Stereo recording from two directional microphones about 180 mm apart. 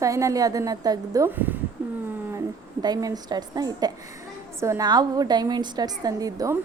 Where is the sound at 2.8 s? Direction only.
20° right (ahead or behind).